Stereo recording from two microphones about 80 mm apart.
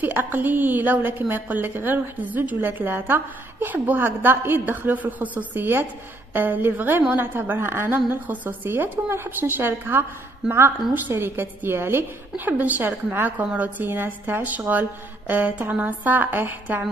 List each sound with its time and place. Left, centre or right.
0.0 s a woman's voice: right